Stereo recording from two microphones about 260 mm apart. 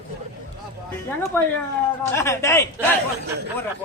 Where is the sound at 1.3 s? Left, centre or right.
Centre.